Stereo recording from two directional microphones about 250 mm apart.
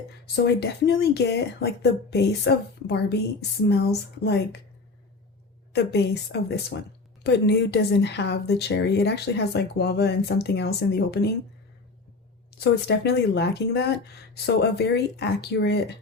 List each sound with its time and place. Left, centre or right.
0.4 s a woman's voice: left
5.7 s a woman's voice: left
12.5 s a woman's voice: left